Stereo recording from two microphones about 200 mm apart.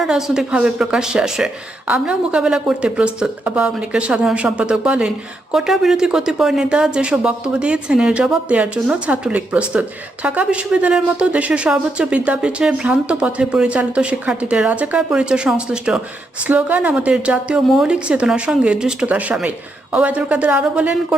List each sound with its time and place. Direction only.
0.0 s a woman's voice: 5° right (ahead or behind)